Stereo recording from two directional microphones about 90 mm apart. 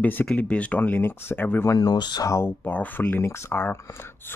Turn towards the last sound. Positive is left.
turn(degrees=25)  # may be behind; listen again after turning